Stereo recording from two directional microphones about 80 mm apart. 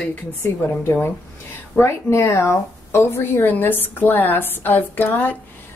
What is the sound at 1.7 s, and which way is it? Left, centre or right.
A woman's voice, left.